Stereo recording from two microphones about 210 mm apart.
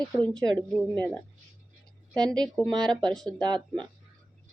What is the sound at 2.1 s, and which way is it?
Speech, 20° right (ahead or behind).